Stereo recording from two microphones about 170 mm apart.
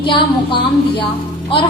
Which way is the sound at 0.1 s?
30° left (ahead or behind).